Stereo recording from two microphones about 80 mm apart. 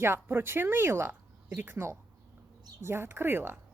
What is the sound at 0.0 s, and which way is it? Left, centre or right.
A woman's voice, right.